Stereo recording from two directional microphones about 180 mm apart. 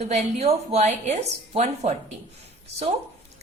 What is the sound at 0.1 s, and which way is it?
A woman's voice, 35° right (ahead or behind).